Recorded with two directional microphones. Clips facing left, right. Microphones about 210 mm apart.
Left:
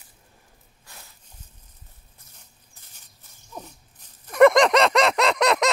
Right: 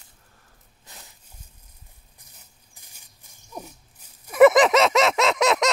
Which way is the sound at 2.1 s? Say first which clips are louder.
Even; 15° right (ahead or behind).